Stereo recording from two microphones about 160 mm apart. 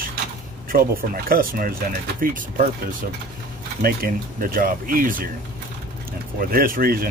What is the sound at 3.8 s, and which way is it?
Speech, 65° right (ahead or behind).